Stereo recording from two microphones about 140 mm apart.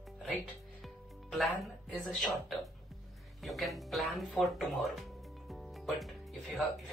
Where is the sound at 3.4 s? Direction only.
Centre (ahead or behind).